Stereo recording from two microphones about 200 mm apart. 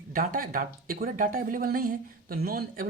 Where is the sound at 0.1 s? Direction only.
45° right (ahead or behind).